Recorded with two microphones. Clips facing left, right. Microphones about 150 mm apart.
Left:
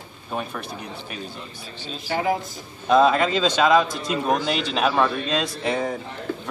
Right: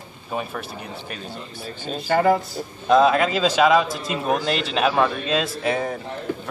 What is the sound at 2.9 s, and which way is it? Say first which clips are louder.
Speech: right 1 dB; 5° right (ahead or behind).